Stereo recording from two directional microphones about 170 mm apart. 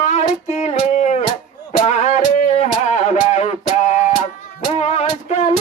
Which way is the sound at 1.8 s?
40° left (ahead or behind).